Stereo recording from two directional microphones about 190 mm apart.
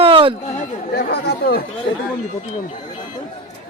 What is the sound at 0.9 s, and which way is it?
Speech, 60° left (ahead or behind).